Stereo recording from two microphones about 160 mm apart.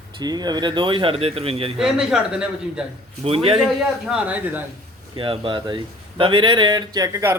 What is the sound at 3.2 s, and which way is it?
Speech, 35° right (ahead or behind).